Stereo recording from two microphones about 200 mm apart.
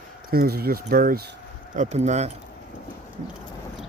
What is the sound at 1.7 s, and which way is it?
Speech, 35° right (ahead or behind).